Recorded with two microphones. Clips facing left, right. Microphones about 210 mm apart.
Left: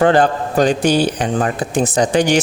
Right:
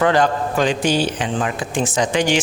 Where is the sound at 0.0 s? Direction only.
35° left (ahead or behind).